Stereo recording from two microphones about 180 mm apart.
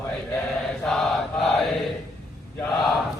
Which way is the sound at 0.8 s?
Centre (ahead or behind).